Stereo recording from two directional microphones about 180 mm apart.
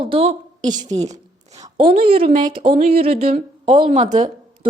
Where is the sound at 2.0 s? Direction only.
30° right (ahead or behind).